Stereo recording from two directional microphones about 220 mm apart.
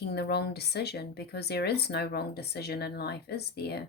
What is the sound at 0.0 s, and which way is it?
Speech, 45° left (ahead or behind).